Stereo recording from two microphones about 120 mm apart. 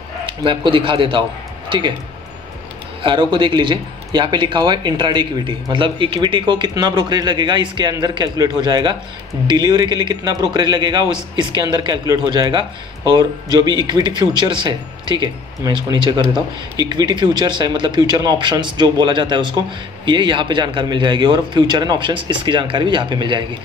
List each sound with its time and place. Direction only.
0.3 s a man's voice: 45° right (ahead or behind)
3.0 s a man's voice: 40° right (ahead or behind)